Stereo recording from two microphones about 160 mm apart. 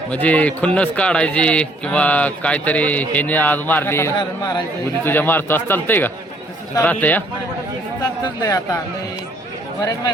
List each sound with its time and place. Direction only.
0.1 s a man's voice: 10° left (ahead or behind)
4.2 s speech: 25° left (ahead or behind)
5.0 s a man's voice: 10° left (ahead or behind)
8.2 s speech: 20° left (ahead or behind)